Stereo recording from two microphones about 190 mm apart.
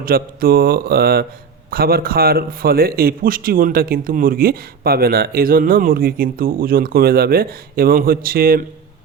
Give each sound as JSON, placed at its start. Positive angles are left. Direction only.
{"t": 0.0, "sound": "speech", "side_deg": -50}